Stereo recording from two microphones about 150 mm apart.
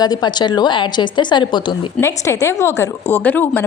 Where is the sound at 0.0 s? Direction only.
30° left (ahead or behind).